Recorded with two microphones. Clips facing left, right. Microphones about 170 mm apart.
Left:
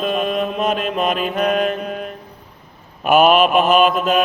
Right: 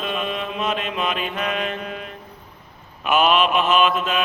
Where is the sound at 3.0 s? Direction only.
45° left (ahead or behind).